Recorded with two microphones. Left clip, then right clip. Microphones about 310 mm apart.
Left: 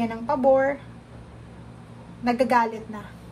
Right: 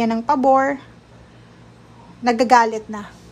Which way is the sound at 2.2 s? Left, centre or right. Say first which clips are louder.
Right 7 dB; centre.